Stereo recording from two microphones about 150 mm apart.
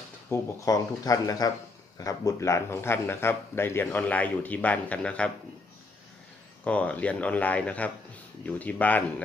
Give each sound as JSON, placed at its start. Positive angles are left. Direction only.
{"t": 0.3, "sound": "a man's voice", "side_deg": 20}
{"t": 6.6, "sound": "a man's voice", "side_deg": 10}